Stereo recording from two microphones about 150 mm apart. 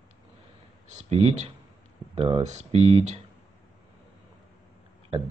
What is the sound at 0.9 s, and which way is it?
Speech, 50° right (ahead or behind).